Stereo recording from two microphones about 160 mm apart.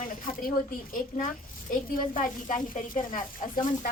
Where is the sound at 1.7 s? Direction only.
55° left (ahead or behind).